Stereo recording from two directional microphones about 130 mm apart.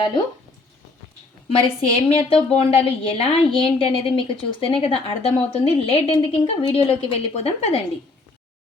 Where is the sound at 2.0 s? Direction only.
50° left (ahead or behind).